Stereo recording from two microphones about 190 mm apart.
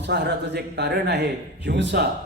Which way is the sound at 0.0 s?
60° right (ahead or behind).